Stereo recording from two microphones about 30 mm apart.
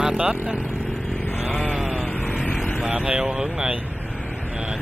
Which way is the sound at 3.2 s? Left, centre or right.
Right.